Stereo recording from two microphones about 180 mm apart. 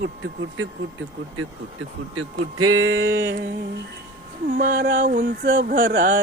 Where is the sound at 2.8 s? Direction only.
90° right.